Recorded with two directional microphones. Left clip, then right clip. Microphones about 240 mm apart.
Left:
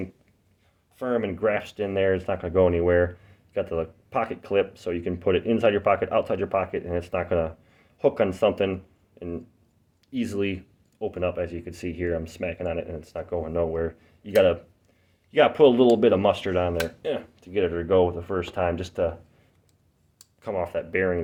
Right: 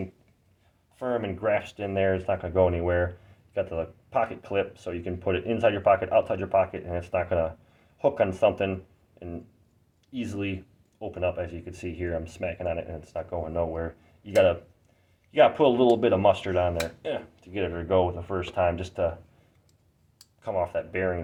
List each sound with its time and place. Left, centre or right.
0.9 s speech: left
20.4 s speech: left